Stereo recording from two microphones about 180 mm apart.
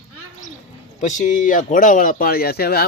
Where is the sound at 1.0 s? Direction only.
45° left (ahead or behind); by 2.8 s 60° left (ahead or behind).